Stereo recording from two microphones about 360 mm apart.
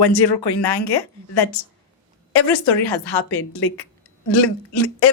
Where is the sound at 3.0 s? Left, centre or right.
Left.